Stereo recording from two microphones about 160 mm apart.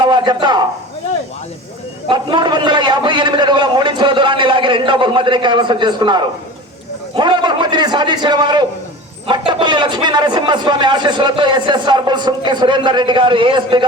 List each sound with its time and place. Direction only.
0.0 s speech: 30° right (ahead or behind)
2.0 s speech: 30° right (ahead or behind)